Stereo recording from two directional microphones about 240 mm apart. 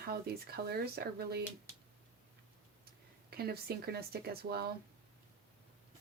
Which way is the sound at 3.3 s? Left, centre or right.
Right.